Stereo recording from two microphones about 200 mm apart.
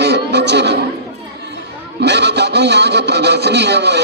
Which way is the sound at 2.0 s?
60° right (ahead or behind).